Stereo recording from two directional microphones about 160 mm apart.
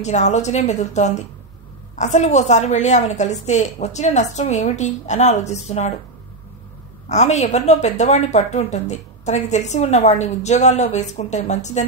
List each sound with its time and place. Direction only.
0.0 s a woman's voice: 45° left (ahead or behind)
7.1 s a woman's voice: 45° left (ahead or behind)